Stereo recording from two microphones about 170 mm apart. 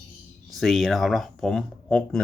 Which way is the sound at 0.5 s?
Centre (ahead or behind).